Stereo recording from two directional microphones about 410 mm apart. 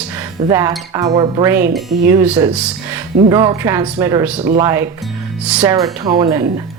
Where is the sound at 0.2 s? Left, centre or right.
Centre.